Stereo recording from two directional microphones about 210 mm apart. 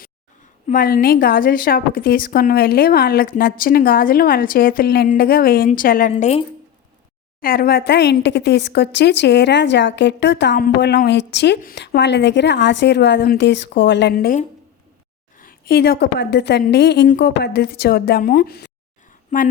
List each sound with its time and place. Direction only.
0.7 s a woman's voice: 40° left (ahead or behind)
7.4 s a woman's voice: 45° left (ahead or behind)
19.3 s speech: 35° left (ahead or behind)